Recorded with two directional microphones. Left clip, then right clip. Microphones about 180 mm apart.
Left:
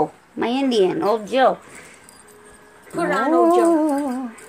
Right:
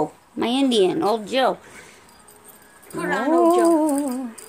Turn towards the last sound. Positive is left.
turn(degrees=-5)  # may be behind; listen again after turning